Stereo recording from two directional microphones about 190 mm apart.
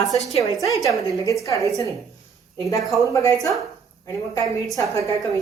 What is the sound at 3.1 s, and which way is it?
A woman's voice, 15° left (ahead or behind).